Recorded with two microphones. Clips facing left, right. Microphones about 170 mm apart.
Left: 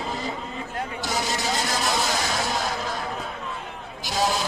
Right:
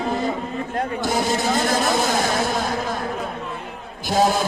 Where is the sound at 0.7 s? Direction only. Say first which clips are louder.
Right 6 dB; 50° right (ahead or behind).